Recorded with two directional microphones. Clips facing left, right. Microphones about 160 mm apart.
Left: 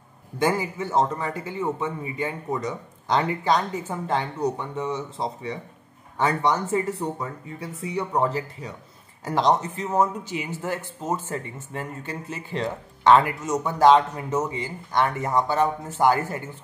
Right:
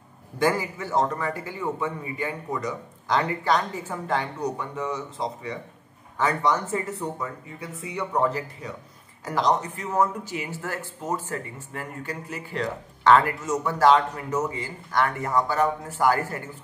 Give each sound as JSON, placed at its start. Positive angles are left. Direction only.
{"t": 0.4, "sound": "speech", "side_deg": 20}